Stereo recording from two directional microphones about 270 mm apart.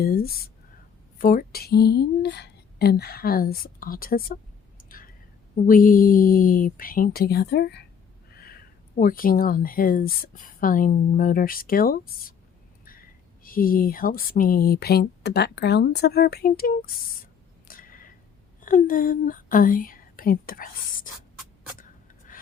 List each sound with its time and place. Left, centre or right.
0.0 s a woman's voice: left
4.9 s whispering: left
5.6 s a woman's voice: left
9.0 s a woman's voice: left
17.7 s a sound: left
18.6 s speech: left